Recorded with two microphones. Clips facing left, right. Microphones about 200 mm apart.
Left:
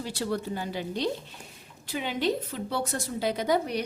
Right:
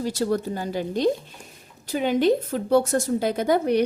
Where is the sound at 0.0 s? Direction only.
40° right (ahead or behind).